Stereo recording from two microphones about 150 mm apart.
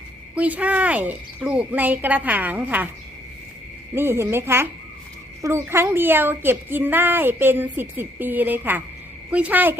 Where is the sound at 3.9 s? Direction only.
15° right (ahead or behind).